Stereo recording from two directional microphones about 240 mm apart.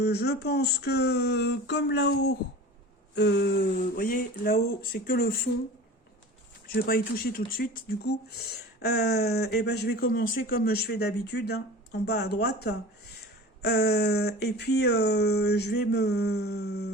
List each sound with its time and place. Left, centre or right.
0.0 s speech: left
6.7 s speech: left